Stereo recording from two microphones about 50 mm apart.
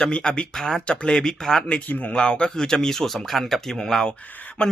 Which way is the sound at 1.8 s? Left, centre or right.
Left.